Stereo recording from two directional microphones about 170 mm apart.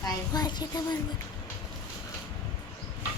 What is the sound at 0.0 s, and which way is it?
Speech, 25° left (ahead or behind).